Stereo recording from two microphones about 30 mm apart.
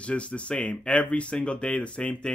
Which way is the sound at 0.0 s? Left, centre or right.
Left.